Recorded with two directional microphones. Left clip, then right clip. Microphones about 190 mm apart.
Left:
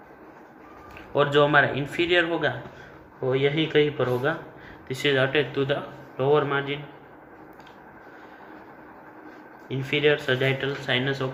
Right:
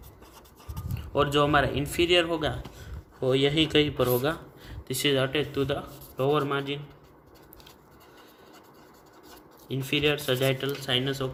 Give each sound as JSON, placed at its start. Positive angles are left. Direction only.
{"t": 1.1, "sound": "speech", "side_deg": -55}
{"t": 3.2, "sound": "speech", "side_deg": -90}
{"t": 4.9, "sound": "speech", "side_deg": -70}
{"t": 9.6, "sound": "speech", "side_deg": -80}